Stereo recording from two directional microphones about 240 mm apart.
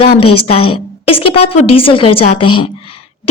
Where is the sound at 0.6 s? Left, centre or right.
Left.